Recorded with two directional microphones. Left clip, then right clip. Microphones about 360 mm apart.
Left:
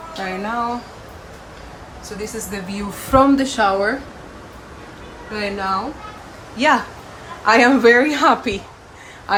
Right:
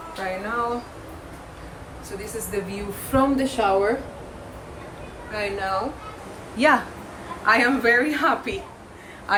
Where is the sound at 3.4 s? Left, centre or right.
Centre.